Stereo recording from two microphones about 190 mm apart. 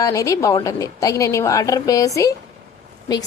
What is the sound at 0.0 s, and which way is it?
A woman's voice, 20° left (ahead or behind).